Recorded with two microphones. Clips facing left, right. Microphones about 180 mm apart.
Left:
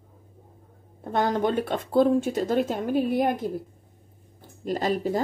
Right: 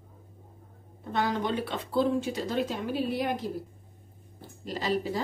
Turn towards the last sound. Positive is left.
turn(degrees=50)  # may be behind; listen again after turning